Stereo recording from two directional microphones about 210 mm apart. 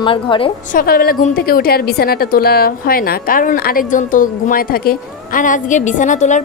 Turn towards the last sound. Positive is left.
turn(degrees=35)  # may be behind; listen again after turning